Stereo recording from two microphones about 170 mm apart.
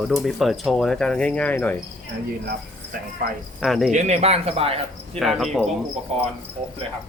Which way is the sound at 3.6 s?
Centre (ahead or behind).